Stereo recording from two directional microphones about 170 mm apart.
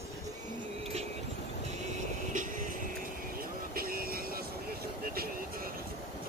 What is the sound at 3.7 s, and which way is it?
Vehicle, 60° right (ahead or behind).